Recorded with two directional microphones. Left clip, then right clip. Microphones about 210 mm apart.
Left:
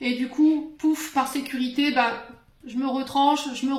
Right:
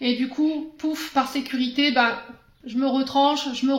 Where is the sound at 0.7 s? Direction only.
45° right (ahead or behind).